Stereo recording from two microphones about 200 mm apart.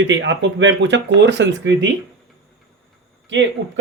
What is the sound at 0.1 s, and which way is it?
Speech, 65° right (ahead or behind).